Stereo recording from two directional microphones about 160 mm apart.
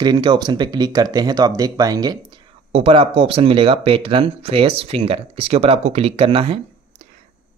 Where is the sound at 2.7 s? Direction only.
35° right (ahead or behind).